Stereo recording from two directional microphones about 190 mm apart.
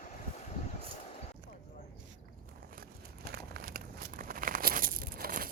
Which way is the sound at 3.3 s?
55° right (ahead or behind).